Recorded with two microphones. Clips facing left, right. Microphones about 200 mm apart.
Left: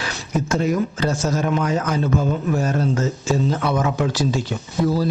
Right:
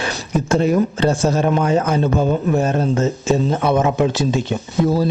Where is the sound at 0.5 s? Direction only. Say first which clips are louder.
Right 5 dB; 30° right (ahead or behind).